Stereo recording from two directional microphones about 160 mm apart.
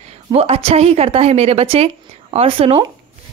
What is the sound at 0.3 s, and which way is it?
A woman's voice, 35° right (ahead or behind).